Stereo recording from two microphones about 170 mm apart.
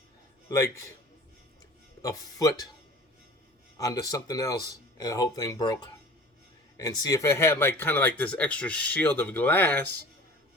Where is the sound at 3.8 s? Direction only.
20° left (ahead or behind).